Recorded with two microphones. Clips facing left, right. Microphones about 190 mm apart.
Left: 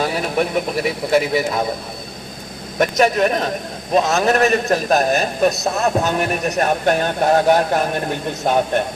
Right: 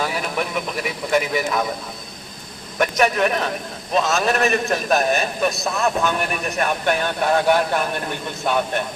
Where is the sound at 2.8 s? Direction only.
30° left (ahead or behind).